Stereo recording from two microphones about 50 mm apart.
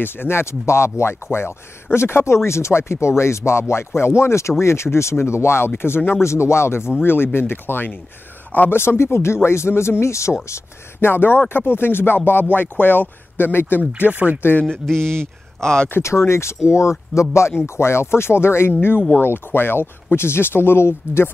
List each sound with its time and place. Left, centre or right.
0.0 s speech: left
4.2 s speech: left
5.8 s speech: left
6.2 s speech: left
7.0 s speech: left
8.7 s speech: left
11.0 s speech: left
14.1 s speech: right
14.7 s speech: centre
16.0 s speech: left